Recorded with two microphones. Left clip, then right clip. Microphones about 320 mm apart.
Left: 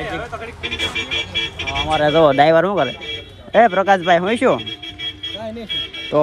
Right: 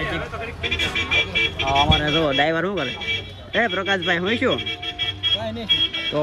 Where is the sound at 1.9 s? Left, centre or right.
Centre.